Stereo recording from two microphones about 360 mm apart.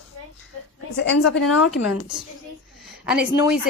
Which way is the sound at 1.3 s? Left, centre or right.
Left.